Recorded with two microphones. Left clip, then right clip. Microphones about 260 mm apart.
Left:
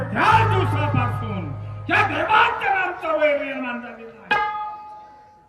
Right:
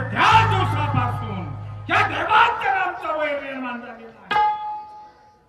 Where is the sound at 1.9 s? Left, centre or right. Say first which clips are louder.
Even; centre.